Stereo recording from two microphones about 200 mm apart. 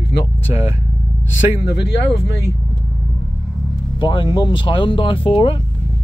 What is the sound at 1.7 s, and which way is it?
Speech, 60° left (ahead or behind).